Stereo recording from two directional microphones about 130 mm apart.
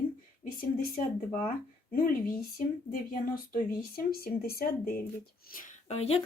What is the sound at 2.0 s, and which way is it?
Speech, 90° left.